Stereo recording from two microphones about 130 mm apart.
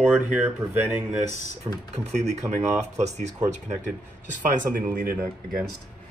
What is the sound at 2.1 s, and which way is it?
Speech, 60° right (ahead or behind).